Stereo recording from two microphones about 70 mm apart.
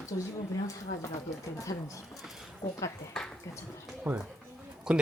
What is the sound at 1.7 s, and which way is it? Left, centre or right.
Speech, left.